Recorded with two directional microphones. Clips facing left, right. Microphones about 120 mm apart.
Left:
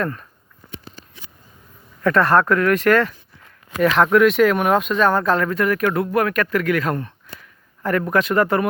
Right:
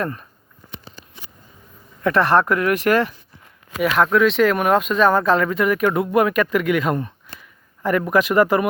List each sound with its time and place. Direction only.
0.0 s speech: 15° right (ahead or behind)
2.0 s speech: 15° right (ahead or behind)